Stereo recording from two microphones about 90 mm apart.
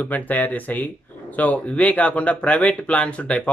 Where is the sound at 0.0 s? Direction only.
20° left (ahead or behind).